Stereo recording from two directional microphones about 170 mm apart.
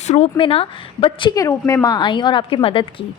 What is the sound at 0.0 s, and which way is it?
A woman's voice, 40° left (ahead or behind).